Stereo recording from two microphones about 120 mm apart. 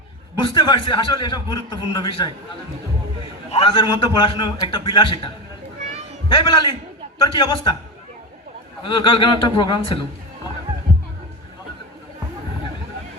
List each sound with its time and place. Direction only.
0.3 s a man's voice: 40° left (ahead or behind)
3.5 s a man's voice: 50° left (ahead or behind)
8.8 s a man's voice: 45° left (ahead or behind)